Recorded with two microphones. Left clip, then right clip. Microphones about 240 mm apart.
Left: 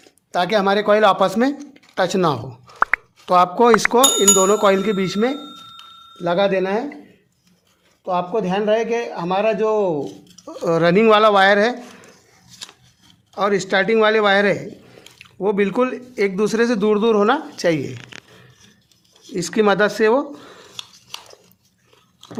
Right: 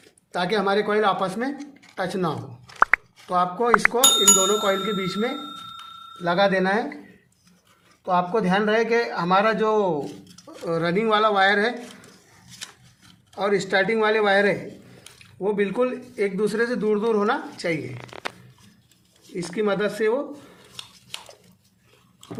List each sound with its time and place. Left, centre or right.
0.3 s speech: left
2.7 s a sound: centre
3.2 s speech: left
4.0 s speech: centre
4.4 s speech: left
5.4 s a sound: centre
6.2 s speech: left
8.0 s a man's voice: left
10.4 s speech: left
13.3 s speech: left
19.4 s speech: left